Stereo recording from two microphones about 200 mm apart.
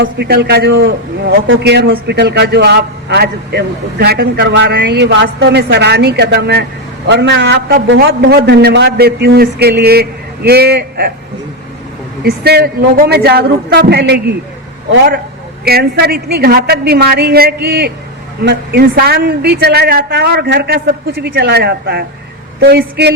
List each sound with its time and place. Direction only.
0.0 s a man's voice: 55° right (ahead or behind)
12.2 s a man's voice: 55° right (ahead or behind)
15.6 s a man's voice: 50° right (ahead or behind)